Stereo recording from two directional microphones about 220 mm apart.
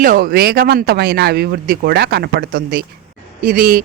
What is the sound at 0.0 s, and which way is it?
Speech, 40° right (ahead or behind).